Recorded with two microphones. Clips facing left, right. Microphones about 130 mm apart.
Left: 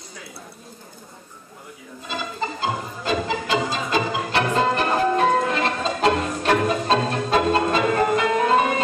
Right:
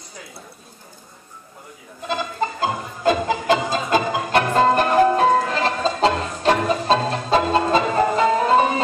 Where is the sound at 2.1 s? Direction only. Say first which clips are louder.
Right 4 dB; 50° right (ahead or behind).